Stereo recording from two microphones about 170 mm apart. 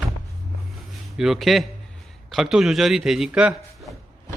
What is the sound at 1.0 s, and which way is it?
A man's voice, 5° right (ahead or behind).